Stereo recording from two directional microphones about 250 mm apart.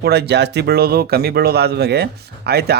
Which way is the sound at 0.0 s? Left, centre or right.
Right.